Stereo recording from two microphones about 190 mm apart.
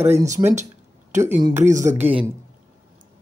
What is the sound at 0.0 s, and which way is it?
Speech, 35° right (ahead or behind).